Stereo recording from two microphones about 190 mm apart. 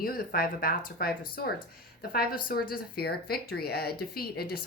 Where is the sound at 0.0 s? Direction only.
50° left (ahead or behind).